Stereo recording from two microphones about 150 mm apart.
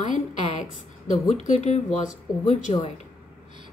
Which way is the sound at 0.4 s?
50° left (ahead or behind).